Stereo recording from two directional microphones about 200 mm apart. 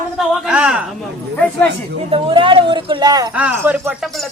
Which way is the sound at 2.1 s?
25° right (ahead or behind).